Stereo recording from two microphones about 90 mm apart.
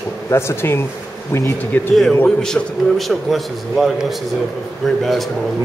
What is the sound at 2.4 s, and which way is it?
A man's voice, 5° left (ahead or behind).